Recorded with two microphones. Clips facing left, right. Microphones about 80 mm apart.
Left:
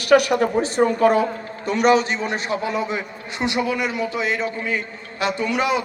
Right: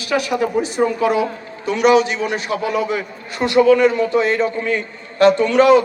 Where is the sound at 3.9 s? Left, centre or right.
Centre.